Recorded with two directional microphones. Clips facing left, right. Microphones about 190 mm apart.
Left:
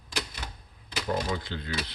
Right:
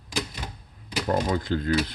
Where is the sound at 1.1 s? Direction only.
45° right (ahead or behind).